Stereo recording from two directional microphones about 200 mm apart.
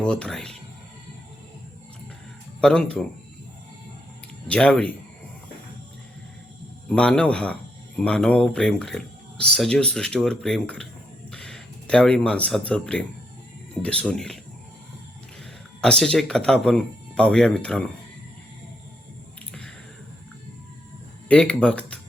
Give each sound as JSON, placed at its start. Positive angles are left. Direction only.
{"t": 0.0, "sound": "speech", "side_deg": 5}
{"t": 2.6, "sound": "speech", "side_deg": 5}
{"t": 4.4, "sound": "speech", "side_deg": 5}
{"t": 6.8, "sound": "speech", "side_deg": 5}
{"t": 15.8, "sound": "speech", "side_deg": 5}
{"t": 21.2, "sound": "speech", "side_deg": 5}